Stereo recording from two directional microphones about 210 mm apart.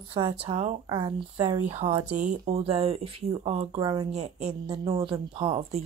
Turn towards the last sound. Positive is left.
turn(degrees=-25)  # may be behind; listen again after turning